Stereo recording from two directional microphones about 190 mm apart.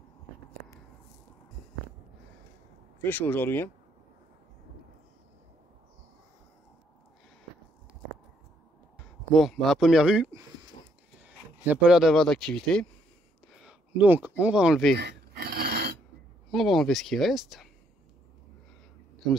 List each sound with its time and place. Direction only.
3.0 s speech: 10° left (ahead or behind)
9.3 s speech: centre (ahead or behind)
13.5 s a sound: 5° right (ahead or behind)
14.4 s speech: 5° right (ahead or behind)
15.0 s a sound: 60° right (ahead or behind)
16.4 s speech: centre (ahead or behind)